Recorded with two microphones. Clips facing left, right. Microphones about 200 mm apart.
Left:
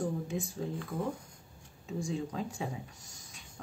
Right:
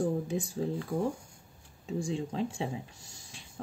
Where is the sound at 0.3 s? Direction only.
35° right (ahead or behind).